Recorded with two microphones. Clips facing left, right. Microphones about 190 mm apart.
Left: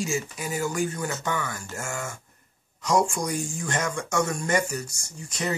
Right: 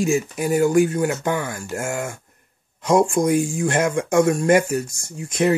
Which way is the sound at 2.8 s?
55° right (ahead or behind).